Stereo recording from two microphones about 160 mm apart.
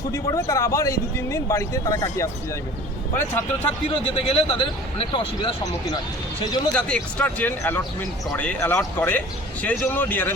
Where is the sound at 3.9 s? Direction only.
35° left (ahead or behind).